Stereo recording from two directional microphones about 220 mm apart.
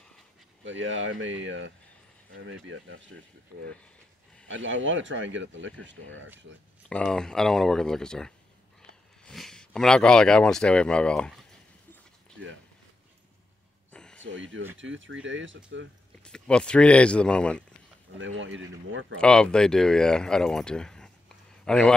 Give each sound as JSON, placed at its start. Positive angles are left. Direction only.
{"t": 0.7, "sound": "speech", "side_deg": -60}
{"t": 4.5, "sound": "speech", "side_deg": -60}
{"t": 6.9, "sound": "speech", "side_deg": 5}
{"t": 13.9, "sound": "a sound", "side_deg": 5}
{"t": 14.2, "sound": "speech", "side_deg": -60}
{"t": 16.2, "sound": "speech", "side_deg": 5}
{"t": 18.1, "sound": "speech", "side_deg": -60}
{"t": 19.1, "sound": "speech", "side_deg": 5}